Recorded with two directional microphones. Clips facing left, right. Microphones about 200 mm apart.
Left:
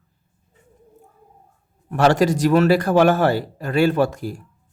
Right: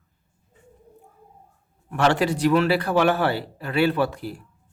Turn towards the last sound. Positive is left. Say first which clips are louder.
# left 4 dB
turn(degrees=45)  # may be behind; listen again after turning